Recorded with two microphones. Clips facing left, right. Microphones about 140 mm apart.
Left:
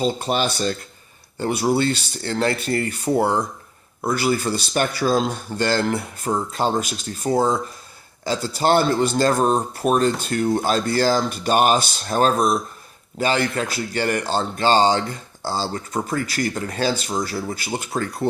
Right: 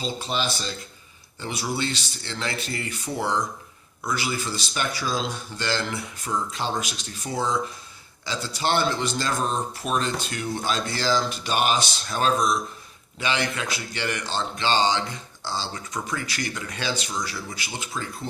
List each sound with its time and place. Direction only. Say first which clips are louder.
0.0 s a man's voice: left 7 dB; 50° left (ahead or behind)
17.9 s speech: left 9 dB; 65° left (ahead or behind)